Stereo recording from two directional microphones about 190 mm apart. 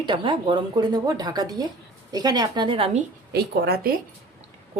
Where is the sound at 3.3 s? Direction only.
60° right (ahead or behind).